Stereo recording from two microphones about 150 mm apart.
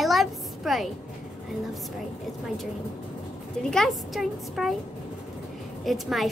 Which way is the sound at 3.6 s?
5° left (ahead or behind).